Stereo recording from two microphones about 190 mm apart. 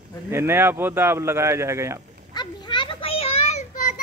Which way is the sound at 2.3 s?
25° left (ahead or behind).